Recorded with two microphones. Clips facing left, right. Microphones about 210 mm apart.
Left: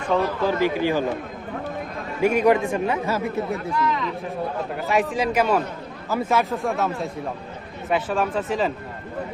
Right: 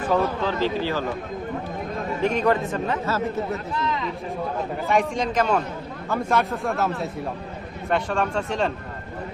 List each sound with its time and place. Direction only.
0.4 s speech: 15° left (ahead or behind)
2.2 s speech: 10° left (ahead or behind)
3.8 s a man's voice: 25° right (ahead or behind)
4.9 s speech: 5° left (ahead or behind)